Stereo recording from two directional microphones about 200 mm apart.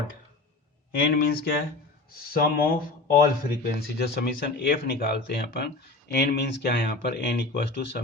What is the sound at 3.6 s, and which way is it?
Speech, 50° left (ahead or behind).